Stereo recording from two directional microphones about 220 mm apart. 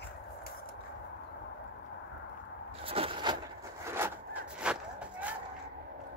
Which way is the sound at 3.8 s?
10° right (ahead or behind).